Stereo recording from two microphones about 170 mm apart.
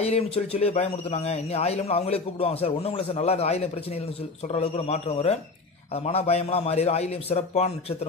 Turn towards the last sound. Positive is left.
turn(degrees=35)  # may be behind; listen again after turning